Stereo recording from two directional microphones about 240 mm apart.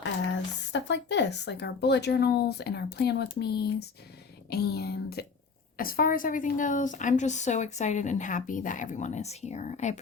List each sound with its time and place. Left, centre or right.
0.0 s a woman's voice: left